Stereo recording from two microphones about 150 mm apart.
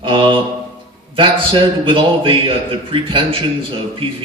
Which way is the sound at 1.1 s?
35° right (ahead or behind).